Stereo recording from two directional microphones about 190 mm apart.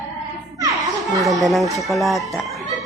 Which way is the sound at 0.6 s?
20° right (ahead or behind).